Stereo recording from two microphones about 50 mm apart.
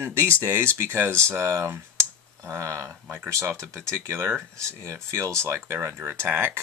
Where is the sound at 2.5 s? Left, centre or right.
Right.